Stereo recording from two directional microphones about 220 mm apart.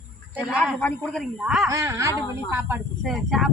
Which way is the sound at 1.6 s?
15° right (ahead or behind).